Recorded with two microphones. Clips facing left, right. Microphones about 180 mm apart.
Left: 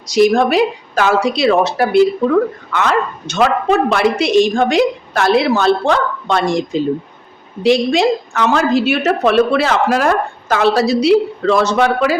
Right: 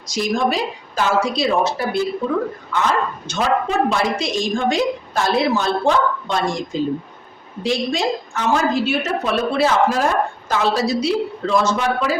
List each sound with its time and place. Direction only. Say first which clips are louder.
0.1 s a woman's voice: left 8 dB; 70° left (ahead or behind)
7.6 s a woman's voice: left 8 dB; 75° left (ahead or behind)